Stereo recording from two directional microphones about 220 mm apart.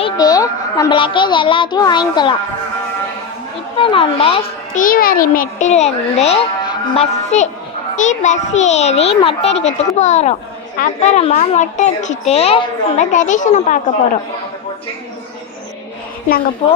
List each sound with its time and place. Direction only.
0.0 s a child's voice: 20° left (ahead or behind)
3.8 s a child's voice: 25° left (ahead or behind)
4.8 s a child's voice: 40° left (ahead or behind)